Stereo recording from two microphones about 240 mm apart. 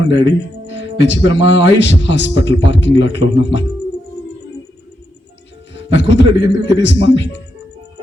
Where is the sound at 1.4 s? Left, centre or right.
Left.